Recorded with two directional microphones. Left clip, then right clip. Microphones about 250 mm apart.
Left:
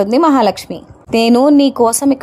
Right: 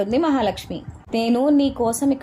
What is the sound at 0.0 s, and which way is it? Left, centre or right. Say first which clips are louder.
A woman's voice: left 9 dB; left.